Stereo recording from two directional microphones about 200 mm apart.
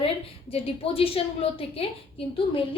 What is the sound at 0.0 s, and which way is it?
A woman's voice, 30° left (ahead or behind).